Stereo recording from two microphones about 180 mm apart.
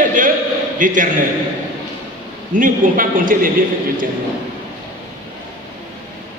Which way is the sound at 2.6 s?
50° right (ahead or behind).